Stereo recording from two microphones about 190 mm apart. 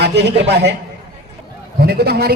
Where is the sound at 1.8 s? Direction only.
55° right (ahead or behind).